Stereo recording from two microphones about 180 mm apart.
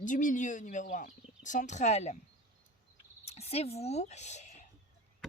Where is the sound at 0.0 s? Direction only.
45° left (ahead or behind).